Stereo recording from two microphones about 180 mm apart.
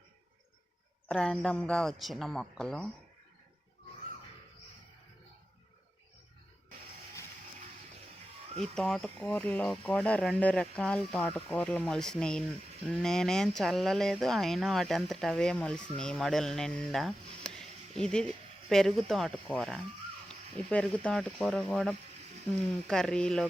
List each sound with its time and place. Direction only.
1.0 s speech: 5° left (ahead or behind)
8.5 s speech: 5° left (ahead or behind)